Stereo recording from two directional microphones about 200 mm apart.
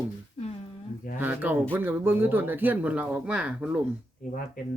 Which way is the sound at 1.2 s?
10° right (ahead or behind).